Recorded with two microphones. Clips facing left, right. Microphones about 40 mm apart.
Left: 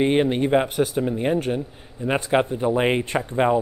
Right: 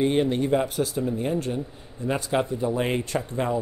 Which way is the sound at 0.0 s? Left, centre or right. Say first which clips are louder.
Left 3 dB; left.